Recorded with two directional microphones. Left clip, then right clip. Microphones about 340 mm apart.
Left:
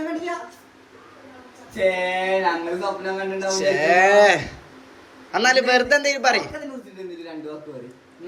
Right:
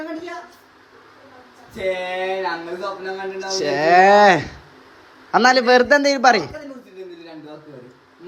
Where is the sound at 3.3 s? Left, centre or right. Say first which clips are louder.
Left 1 dB; centre.